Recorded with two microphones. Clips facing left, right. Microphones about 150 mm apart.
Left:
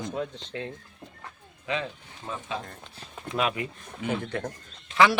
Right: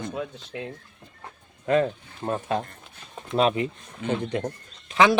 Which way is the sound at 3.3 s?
30° right (ahead or behind).